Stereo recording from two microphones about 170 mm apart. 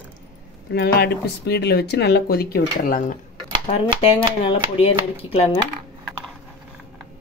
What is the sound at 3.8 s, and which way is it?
Speech, 35° left (ahead or behind).